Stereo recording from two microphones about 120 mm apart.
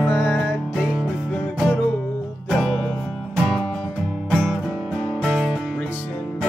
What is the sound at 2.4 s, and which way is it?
Music, 5° left (ahead or behind).